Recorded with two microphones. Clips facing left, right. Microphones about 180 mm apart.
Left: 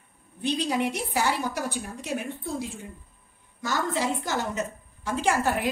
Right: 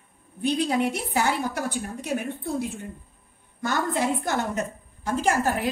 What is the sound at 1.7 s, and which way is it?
A woman's voice, 55° right (ahead or behind).